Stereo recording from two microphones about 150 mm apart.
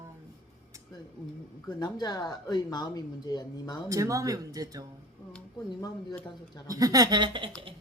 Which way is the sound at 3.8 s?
20° right (ahead or behind).